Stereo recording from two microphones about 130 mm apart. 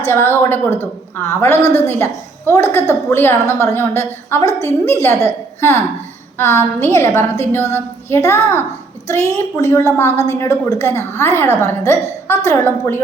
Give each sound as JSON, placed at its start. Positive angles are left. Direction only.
{"t": 0.0, "sound": "a woman's voice", "side_deg": 15}